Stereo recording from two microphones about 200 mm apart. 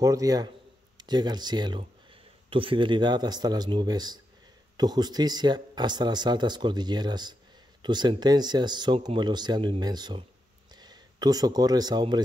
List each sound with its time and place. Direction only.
0.0 s a man's voice: 15° right (ahead or behind)